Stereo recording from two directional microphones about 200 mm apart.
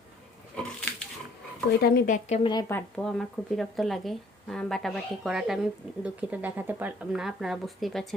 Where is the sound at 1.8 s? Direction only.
50° left (ahead or behind).